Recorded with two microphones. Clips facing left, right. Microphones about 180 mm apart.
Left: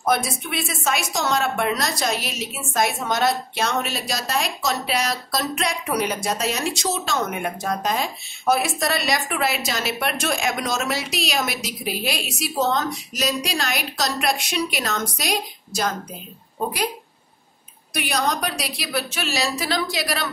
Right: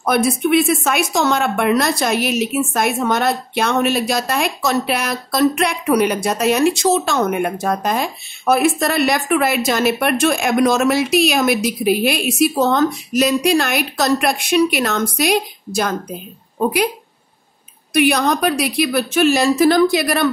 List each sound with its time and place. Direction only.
0.0 s a woman's voice: 60° right (ahead or behind)
17.9 s a woman's voice: 60° right (ahead or behind)